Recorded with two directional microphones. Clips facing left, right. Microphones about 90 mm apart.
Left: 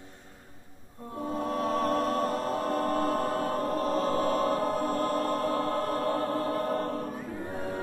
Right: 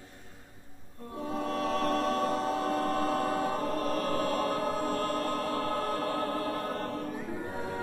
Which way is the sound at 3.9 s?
25° left (ahead or behind).